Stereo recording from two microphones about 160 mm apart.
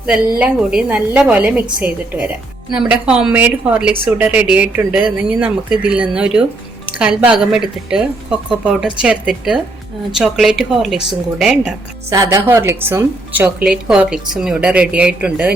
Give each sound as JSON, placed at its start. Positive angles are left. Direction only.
{"t": 0.3, "sound": "a woman's voice", "side_deg": -10}
{"t": 12.1, "sound": "a woman's voice", "side_deg": -20}